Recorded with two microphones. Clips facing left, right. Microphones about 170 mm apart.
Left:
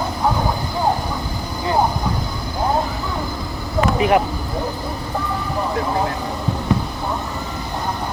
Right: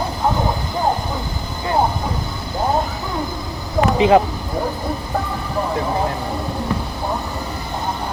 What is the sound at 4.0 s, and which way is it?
Speech, 25° right (ahead or behind).